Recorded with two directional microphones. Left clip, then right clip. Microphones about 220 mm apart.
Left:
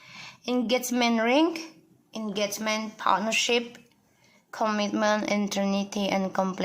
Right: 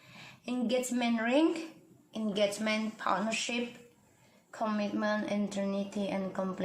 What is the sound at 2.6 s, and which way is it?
A child's voice, 15° left (ahead or behind).